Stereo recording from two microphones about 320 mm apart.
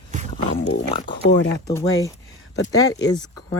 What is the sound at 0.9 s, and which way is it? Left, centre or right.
Speech, centre.